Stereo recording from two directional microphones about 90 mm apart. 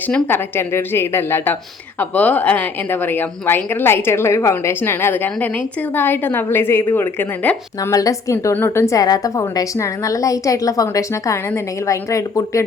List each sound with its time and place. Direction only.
0.1 s a woman's voice: 25° left (ahead or behind)
7.8 s a woman's voice: 40° left (ahead or behind)
8.5 s a woman's voice: 25° left (ahead or behind)
9.0 s a woman's voice: 45° left (ahead or behind)